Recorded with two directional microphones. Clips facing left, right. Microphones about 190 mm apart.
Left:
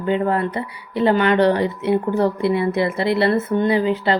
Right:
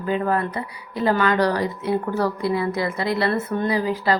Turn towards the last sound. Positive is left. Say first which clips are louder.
# left 3 dB
turn(degrees=25)  # may be behind; listen again after turning